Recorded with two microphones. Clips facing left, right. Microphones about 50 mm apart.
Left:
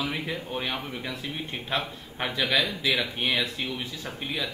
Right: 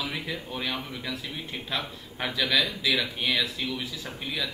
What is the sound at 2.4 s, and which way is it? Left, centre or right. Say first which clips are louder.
A man's voice: even; left.